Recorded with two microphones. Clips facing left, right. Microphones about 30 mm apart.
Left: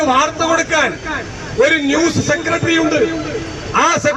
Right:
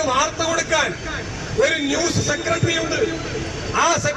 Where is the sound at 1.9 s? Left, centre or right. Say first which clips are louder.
Left 7 dB; left.